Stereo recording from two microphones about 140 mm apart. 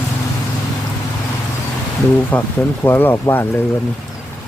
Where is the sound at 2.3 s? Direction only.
10° left (ahead or behind).